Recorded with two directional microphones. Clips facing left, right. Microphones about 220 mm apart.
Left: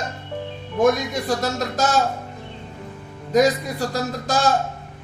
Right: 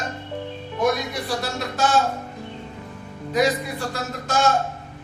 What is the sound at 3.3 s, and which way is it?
Speech, 40° left (ahead or behind).